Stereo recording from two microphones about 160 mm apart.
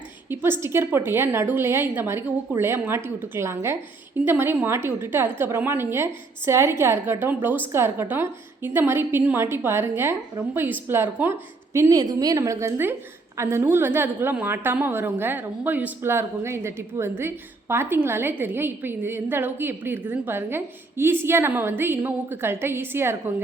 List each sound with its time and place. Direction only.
0.3 s a woman's voice: 15° right (ahead or behind)